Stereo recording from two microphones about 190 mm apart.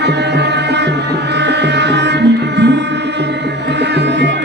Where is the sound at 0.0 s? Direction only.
60° right (ahead or behind).